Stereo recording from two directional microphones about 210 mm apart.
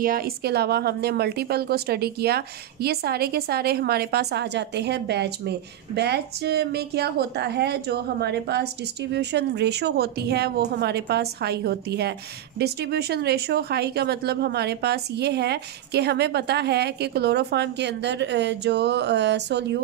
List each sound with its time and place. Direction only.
0.0 s a woman's voice: 45° right (ahead or behind)